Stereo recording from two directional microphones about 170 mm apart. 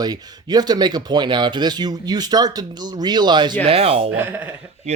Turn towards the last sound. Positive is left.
turn(degrees=-35)  # may be behind; listen again after turning